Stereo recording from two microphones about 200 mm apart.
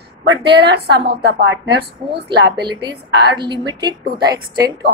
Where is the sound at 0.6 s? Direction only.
55° right (ahead or behind).